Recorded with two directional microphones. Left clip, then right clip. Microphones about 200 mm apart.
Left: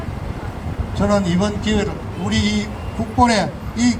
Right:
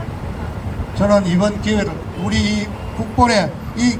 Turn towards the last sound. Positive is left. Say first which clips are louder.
# right 1 dB
turn(degrees=60)  # may be behind; listen again after turning